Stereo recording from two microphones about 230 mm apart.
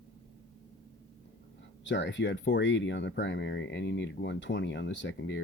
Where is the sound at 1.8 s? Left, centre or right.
Left.